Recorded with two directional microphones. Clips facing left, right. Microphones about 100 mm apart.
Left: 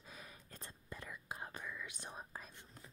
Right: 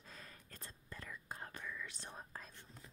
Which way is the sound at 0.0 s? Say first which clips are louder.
Left 1 dB; 10° left (ahead or behind).